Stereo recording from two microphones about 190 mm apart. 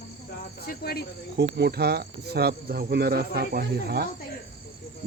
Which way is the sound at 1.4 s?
60° right (ahead or behind).